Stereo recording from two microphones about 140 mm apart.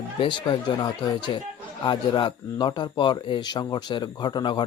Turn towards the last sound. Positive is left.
turn(degrees=35)  # may be behind; listen again after turning